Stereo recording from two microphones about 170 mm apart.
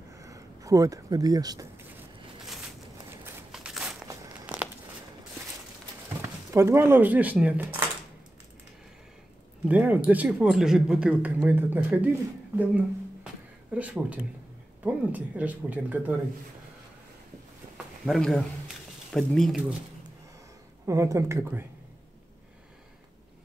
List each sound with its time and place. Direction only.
0.1 s a sound: 20° right (ahead or behind)
3.1 s walk: 15° right (ahead or behind)
4.1 s a sound: 20° right (ahead or behind)
6.2 s speech: 15° right (ahead or behind)
9.7 s speech: 10° right (ahead or behind)
12.5 s a sound: 10° right (ahead or behind)
13.7 s speech: 10° right (ahead or behind)
18.0 s speech: centre (ahead or behind)
20.8 s speech: 20° right (ahead or behind)